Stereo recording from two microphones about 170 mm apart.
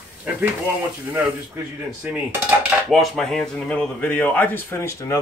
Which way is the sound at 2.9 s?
Centre (ahead or behind).